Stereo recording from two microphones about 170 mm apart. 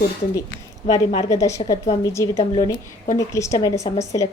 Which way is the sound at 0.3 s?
20° left (ahead or behind).